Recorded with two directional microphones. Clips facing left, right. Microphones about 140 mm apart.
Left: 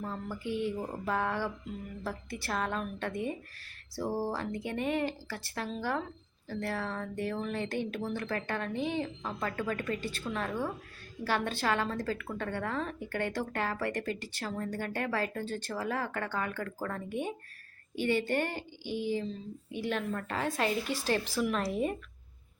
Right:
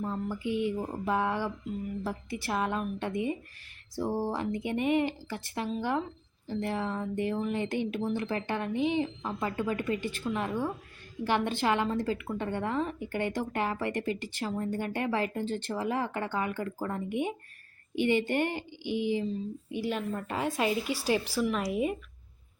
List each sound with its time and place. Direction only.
0.0 s speech: 15° right (ahead or behind)